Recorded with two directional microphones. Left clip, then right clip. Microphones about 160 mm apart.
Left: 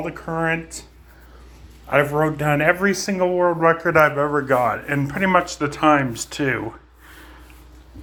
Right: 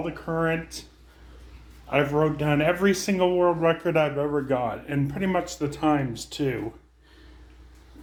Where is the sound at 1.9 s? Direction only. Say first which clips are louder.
Left 5 dB; 5° left (ahead or behind).